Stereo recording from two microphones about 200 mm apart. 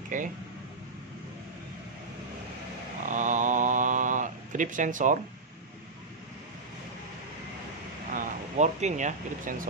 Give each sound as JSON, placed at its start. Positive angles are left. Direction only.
{"t": 0.1, "sound": "speech", "side_deg": -40}
{"t": 3.1, "sound": "mantra", "side_deg": -40}
{"t": 8.1, "sound": "speech", "side_deg": -40}